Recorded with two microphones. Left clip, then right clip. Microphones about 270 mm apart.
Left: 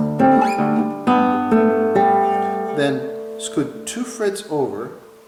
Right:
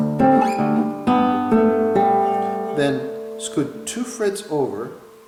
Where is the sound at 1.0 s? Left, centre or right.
Centre.